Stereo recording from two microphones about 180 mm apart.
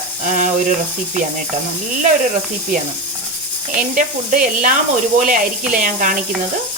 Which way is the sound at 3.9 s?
50° right (ahead or behind).